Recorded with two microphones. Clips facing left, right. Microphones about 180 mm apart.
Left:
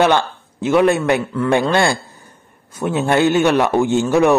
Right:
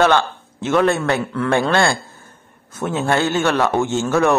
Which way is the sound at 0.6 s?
10° left (ahead or behind).